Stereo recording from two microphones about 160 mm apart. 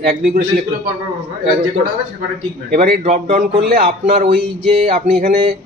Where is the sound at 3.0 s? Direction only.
50° right (ahead or behind).